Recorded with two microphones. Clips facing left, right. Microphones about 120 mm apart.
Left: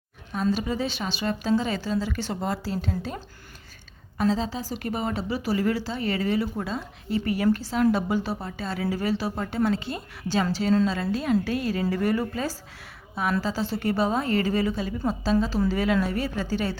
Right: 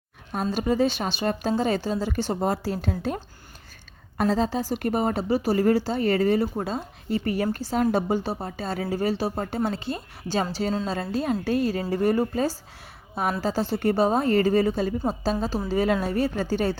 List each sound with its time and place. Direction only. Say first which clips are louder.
0.5 s speech: right 5 dB; 45° right (ahead or behind)
4.2 s speech: right 2 dB; 55° right (ahead or behind); by 12.5 s 40° right (ahead or behind)
13.4 s speech: right 3 dB; 55° right (ahead or behind)